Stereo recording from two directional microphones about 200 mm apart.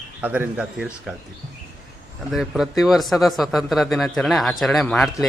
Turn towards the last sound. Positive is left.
turn(degrees=5)  # may be behind; listen again after turning